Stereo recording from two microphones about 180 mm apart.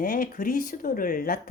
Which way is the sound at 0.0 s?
50° left (ahead or behind).